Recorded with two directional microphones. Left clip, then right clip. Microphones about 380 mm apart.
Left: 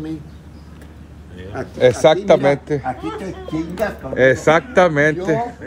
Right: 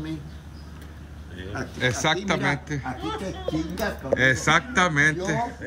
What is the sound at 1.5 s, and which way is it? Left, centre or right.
A man's voice, centre.